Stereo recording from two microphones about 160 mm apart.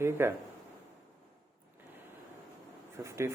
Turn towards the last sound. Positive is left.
turn(degrees=-15)  # may be behind; listen again after turning